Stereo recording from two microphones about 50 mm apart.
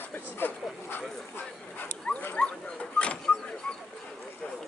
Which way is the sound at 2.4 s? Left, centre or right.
Left.